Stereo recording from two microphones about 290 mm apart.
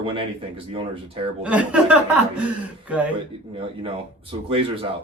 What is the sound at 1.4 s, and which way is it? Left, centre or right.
Speech, centre.